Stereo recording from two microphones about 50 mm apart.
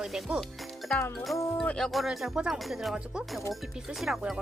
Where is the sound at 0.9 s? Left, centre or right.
Centre.